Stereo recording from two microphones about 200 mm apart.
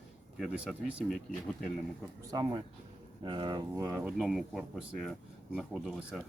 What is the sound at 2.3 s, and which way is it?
Speech, 20° right (ahead or behind).